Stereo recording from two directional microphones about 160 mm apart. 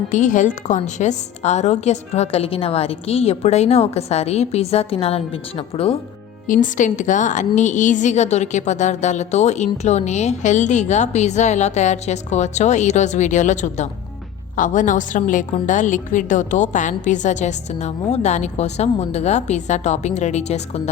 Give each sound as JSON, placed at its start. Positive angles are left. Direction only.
{"t": 0.1, "sound": "a woman's voice", "side_deg": 50}
{"t": 6.5, "sound": "a woman's voice", "side_deg": 55}